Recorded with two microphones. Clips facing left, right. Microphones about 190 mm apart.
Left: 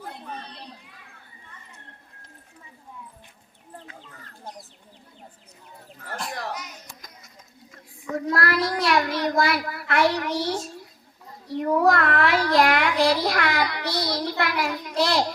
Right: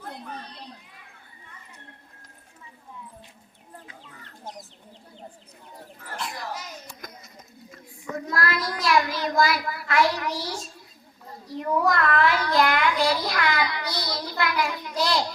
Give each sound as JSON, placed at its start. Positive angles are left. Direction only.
{"t": 6.1, "sound": "a sound", "side_deg": 50}
{"t": 8.3, "sound": "child singing", "side_deg": 65}
{"t": 11.8, "sound": "a child's voice", "side_deg": 65}